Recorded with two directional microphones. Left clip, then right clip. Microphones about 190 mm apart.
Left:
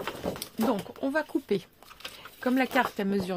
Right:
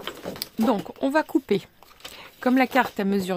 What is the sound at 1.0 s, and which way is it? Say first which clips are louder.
Speech: right 7 dB; 40° right (ahead or behind).